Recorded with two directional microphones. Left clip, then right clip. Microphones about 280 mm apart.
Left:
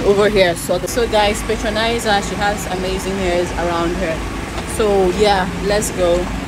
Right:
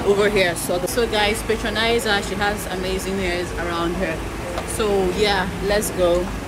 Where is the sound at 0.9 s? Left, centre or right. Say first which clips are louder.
Left 5 dB; centre.